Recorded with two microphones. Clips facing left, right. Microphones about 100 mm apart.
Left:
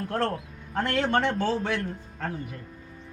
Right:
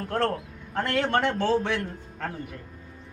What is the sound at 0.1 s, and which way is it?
A man's voice, centre (ahead or behind).